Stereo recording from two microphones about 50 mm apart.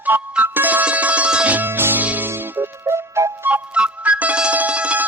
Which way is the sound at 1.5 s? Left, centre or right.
Right.